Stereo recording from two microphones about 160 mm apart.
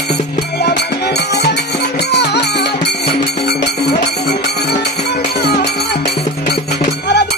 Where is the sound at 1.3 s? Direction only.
90° left.